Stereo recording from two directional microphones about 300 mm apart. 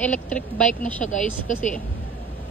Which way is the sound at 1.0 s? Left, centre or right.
Left.